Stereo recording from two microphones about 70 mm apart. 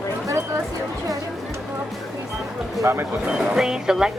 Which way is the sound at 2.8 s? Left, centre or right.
Right.